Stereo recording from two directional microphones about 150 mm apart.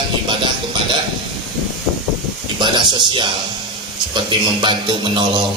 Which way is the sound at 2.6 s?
30° right (ahead or behind).